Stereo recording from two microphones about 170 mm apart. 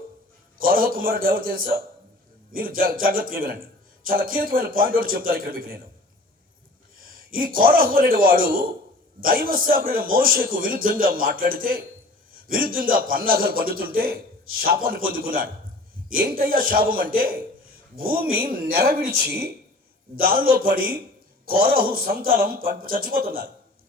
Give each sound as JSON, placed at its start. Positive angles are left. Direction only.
{"t": 0.6, "sound": "a man's voice", "side_deg": -60}
{"t": 7.0, "sound": "a man's voice", "side_deg": -55}